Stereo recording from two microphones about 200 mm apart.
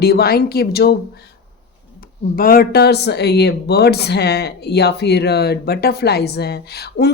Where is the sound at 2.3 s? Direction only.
45° left (ahead or behind).